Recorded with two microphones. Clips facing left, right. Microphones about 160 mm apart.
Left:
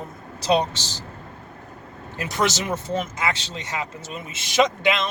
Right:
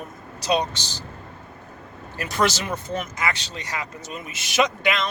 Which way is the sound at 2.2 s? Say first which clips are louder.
Right 1 dB; 20° left (ahead or behind).